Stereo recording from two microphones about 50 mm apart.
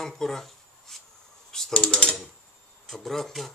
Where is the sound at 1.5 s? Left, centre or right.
Centre.